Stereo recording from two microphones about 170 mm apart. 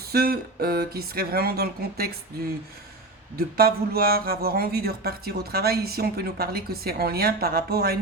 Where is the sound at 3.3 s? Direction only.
60° right (ahead or behind).